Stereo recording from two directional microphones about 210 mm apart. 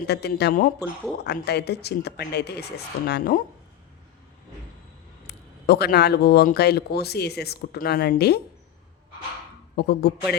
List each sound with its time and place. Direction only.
0.1 s speech: 50° left (ahead or behind)
5.2 s speech: 50° left (ahead or behind)
9.7 s speech: 50° left (ahead or behind)